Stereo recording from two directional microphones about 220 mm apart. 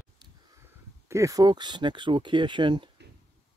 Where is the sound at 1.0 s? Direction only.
15° right (ahead or behind).